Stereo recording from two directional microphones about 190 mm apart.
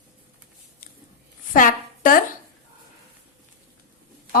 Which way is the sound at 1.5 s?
45° left (ahead or behind).